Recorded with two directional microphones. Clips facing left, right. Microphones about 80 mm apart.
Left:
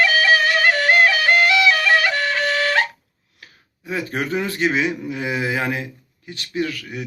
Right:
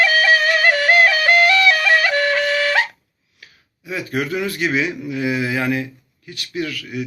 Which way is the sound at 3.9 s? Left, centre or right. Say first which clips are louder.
Right 1 dB; left.